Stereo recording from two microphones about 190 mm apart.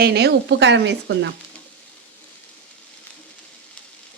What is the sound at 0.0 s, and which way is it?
Speech, 60° right (ahead or behind).